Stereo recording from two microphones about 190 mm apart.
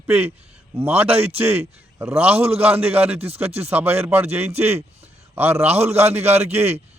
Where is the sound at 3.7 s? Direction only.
10° right (ahead or behind).